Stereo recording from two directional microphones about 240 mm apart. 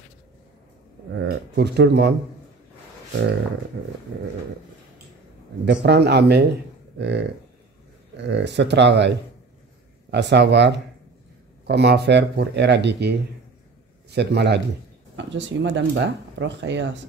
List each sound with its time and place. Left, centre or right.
1.1 s speech: right
5.7 s speech: right